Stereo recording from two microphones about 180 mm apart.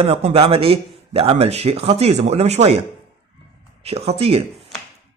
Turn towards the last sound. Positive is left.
turn(degrees=-35)  # may be behind; listen again after turning